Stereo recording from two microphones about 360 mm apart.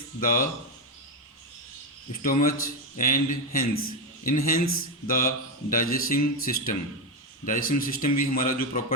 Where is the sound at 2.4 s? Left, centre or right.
Left.